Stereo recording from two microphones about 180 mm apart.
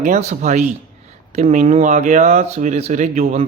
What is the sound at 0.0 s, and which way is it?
Speech, 40° right (ahead or behind).